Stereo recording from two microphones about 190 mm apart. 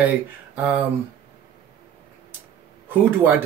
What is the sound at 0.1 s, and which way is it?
Speech, 10° right (ahead or behind).